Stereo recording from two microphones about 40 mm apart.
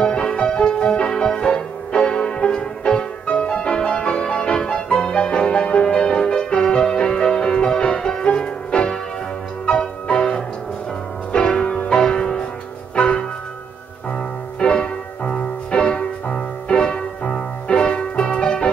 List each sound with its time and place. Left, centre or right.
0.0 s music: centre
1.1 s music: centre
14.6 s music: left